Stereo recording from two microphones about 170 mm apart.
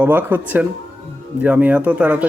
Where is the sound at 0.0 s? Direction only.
10° right (ahead or behind).